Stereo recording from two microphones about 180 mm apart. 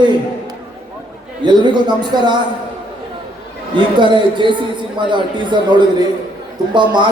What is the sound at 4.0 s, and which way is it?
A man's voice, 25° right (ahead or behind).